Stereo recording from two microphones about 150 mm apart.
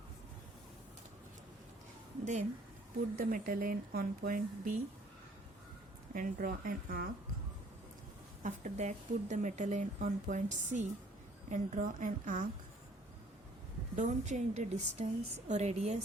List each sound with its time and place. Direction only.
3.2 s speech: 65° right (ahead or behind)
6.1 s speech: 65° right (ahead or behind)
8.4 s a woman's voice: 55° right (ahead or behind)
13.9 s a woman's voice: 55° right (ahead or behind)